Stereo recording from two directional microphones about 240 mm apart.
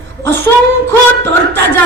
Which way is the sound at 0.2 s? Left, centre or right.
Centre.